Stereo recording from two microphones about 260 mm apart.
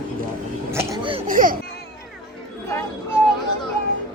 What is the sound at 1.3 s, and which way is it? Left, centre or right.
Speech, right.